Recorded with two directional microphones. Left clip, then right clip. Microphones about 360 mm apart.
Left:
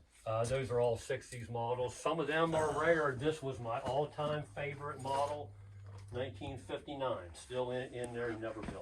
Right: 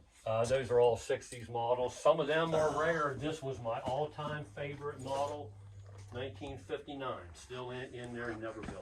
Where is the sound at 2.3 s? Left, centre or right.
Centre.